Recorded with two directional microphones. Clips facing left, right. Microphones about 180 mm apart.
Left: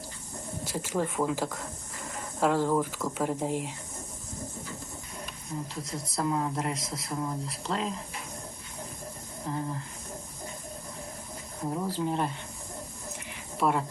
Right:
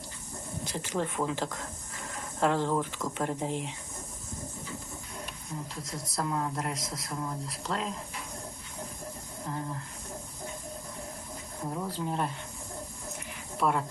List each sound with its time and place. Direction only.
0.6 s speech: 5° left (ahead or behind)
5.8 s speech: centre (ahead or behind)
11.6 s speech: 10° left (ahead or behind)
13.6 s speech: centre (ahead or behind)